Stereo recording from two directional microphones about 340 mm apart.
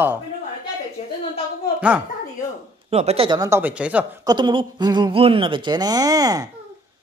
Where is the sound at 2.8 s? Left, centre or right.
Centre.